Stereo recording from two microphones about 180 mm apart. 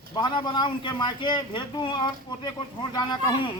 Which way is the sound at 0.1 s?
25° left (ahead or behind).